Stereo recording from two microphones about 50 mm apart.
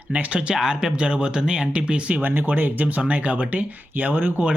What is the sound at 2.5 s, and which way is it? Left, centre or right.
Speech, right.